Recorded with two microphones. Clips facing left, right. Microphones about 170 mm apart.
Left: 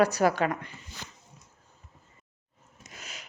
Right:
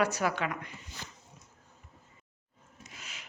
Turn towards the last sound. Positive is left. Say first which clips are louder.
# left 3 dB
turn(degrees=40)  # may be behind; listen again after turning